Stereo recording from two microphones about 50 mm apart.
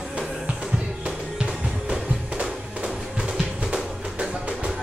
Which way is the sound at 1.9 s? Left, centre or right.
Centre.